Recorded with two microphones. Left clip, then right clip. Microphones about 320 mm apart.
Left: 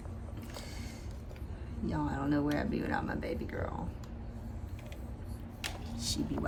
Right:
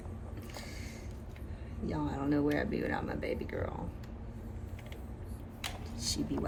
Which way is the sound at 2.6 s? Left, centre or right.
Centre.